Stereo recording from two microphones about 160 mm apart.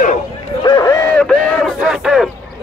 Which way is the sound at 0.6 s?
25° left (ahead or behind).